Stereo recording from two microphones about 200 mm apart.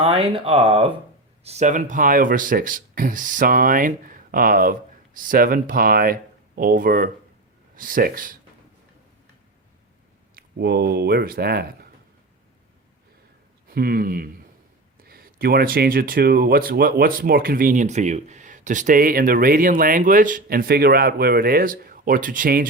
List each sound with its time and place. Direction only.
0.0 s speech: 25° right (ahead or behind); by 8.4 s 45° right (ahead or behind)
10.3 s speech: 50° right (ahead or behind)
13.7 s speech: 50° right (ahead or behind)